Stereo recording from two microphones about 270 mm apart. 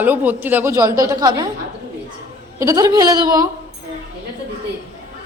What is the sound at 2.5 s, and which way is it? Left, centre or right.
Speech, centre.